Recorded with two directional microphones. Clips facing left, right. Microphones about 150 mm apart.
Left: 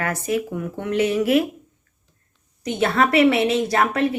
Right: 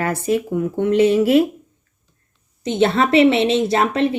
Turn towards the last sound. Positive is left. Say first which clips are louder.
# right 2 dB
turn(degrees=-25)  # may be behind; listen again after turning